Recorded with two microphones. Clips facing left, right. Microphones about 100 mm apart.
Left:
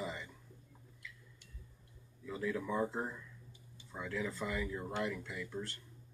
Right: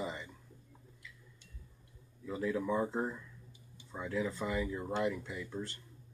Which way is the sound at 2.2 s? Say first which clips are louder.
Right 3 dB; 20° right (ahead or behind).